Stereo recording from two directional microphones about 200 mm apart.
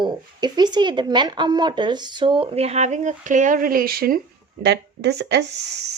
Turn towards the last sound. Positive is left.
turn(degrees=-55)  # may be behind; listen again after turning